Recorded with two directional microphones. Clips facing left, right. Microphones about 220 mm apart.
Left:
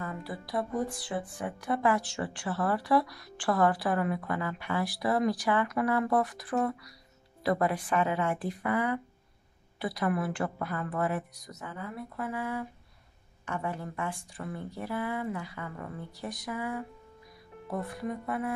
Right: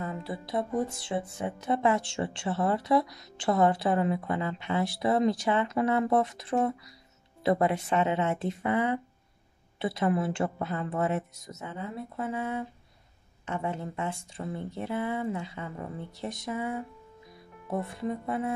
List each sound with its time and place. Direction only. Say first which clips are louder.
0.0 s speech: right 3 dB; 25° right (ahead or behind)